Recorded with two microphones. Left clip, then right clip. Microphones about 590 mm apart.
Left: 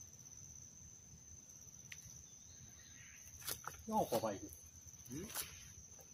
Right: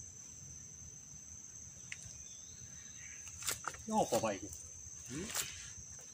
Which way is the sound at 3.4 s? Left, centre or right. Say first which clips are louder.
Right 7 dB; left.